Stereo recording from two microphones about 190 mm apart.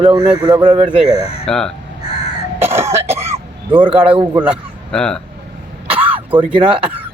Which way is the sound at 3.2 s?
30° right (ahead or behind).